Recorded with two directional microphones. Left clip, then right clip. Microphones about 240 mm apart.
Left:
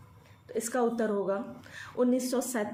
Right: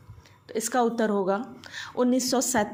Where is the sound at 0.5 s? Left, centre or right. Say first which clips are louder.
Right 4 dB; right.